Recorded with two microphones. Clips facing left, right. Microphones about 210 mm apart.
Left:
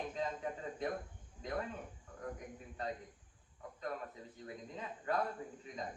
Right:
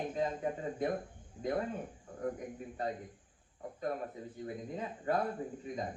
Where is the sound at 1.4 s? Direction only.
40° right (ahead or behind).